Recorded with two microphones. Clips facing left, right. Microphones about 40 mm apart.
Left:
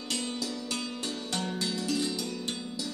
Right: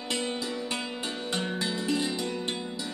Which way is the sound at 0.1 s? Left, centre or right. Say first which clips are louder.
Right 3 dB; right.